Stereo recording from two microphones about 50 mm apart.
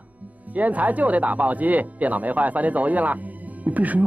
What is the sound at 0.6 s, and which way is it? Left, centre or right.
Speech, right.